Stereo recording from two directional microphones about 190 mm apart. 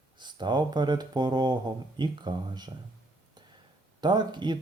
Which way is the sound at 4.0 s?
25° right (ahead or behind).